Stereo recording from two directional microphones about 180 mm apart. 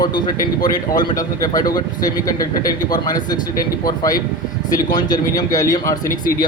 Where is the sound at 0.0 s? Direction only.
25° left (ahead or behind).